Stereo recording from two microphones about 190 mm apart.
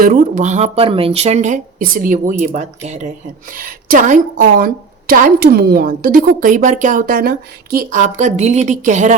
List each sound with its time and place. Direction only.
0.0 s a woman's voice: 50° right (ahead or behind)